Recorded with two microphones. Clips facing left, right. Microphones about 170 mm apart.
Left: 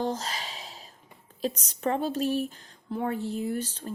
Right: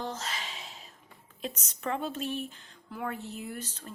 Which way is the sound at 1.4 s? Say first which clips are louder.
Left 8 dB; 35° left (ahead or behind).